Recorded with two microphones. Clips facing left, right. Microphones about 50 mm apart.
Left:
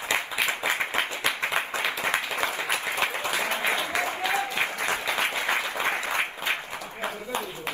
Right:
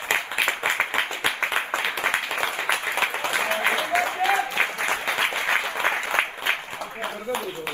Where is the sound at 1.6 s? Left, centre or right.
Right.